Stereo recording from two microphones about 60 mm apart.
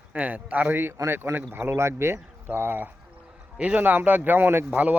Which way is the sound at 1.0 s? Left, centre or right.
Right.